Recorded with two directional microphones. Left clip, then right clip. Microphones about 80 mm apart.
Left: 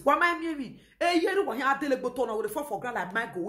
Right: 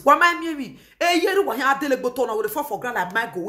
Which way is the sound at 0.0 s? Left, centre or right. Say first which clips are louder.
Right 8 dB; right.